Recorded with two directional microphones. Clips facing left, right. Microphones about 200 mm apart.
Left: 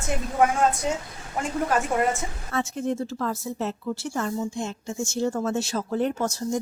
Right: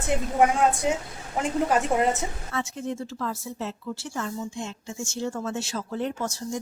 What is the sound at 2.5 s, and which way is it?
Speech, 50° left (ahead or behind).